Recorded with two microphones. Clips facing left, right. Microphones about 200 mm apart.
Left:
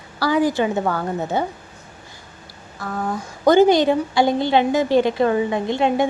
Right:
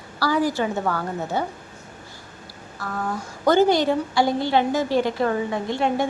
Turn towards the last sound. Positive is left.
turn(degrees=20)  # may be behind; listen again after turning